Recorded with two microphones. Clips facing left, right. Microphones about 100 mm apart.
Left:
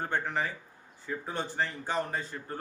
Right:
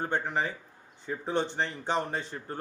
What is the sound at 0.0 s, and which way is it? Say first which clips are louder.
Speech: right 2 dB; 20° right (ahead or behind).